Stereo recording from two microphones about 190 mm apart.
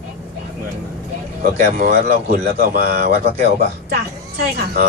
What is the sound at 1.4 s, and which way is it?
Speech, 40° right (ahead or behind).